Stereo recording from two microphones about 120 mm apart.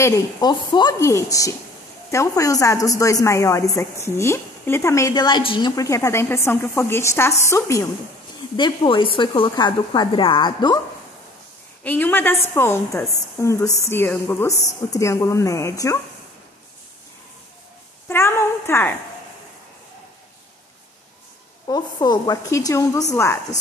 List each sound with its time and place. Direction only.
0.0 s a woman's voice: 35° left (ahead or behind)
0.9 s a woman's voice: 25° left (ahead or behind)
5.1 s a woman's voice: 40° left (ahead or behind)
5.7 s a woman's voice: 30° left (ahead or behind)
8.5 s a woman's voice: 40° left (ahead or behind)
11.8 s a woman's voice: 15° left (ahead or behind)
18.0 s a woman's voice: 20° left (ahead or behind)
21.6 s a woman's voice: 35° left (ahead or behind)